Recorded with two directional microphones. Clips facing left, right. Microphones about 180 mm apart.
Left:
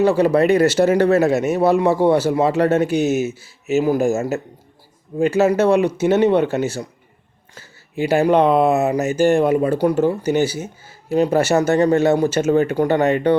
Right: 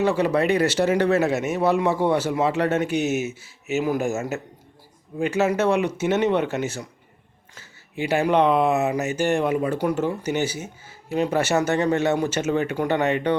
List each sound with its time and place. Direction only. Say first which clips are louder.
0.0 s speech: left 6 dB; 35° left (ahead or behind)